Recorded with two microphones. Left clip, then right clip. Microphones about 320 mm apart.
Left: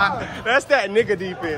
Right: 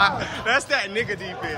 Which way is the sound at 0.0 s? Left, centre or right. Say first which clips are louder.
Even; centre.